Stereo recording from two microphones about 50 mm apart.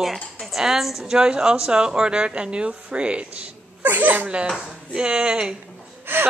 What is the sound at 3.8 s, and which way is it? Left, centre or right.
Speech, right.